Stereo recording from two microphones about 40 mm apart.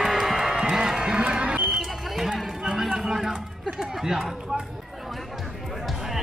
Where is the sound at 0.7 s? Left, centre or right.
Centre.